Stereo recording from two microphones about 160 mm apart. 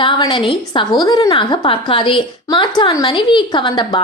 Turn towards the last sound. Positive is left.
turn(degrees=30)  # may be behind; listen again after turning